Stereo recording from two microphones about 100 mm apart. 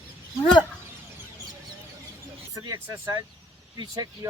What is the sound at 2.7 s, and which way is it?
Speech, 40° right (ahead or behind).